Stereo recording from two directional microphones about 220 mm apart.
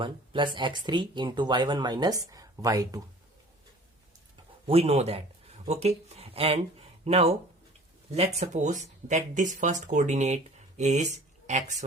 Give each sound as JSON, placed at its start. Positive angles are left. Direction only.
{"t": 0.0, "sound": "speech", "side_deg": -20}
{"t": 4.6, "sound": "speech", "side_deg": -25}